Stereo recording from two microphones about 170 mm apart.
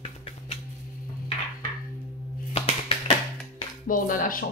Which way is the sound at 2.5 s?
40° left (ahead or behind).